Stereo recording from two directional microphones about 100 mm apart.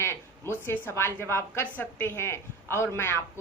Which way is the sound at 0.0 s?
25° left (ahead or behind).